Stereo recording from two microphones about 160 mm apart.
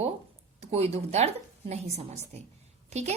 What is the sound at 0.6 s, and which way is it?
A woman's voice, 40° right (ahead or behind).